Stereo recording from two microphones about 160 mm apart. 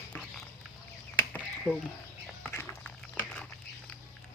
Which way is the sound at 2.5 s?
15° left (ahead or behind).